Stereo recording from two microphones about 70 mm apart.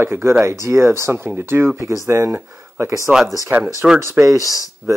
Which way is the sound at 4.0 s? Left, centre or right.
Right.